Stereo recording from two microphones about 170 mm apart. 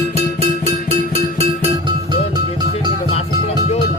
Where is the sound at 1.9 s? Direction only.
25° right (ahead or behind).